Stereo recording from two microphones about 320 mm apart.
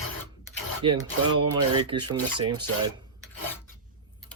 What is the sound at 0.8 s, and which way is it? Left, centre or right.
Speech, centre.